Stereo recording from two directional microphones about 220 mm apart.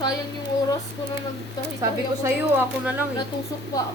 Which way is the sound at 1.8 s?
10° right (ahead or behind).